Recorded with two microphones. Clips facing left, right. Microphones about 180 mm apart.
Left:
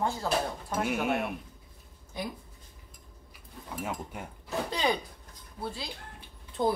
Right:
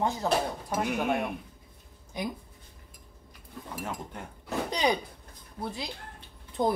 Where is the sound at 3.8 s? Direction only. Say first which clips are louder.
Left 2 dB; 10° left (ahead or behind).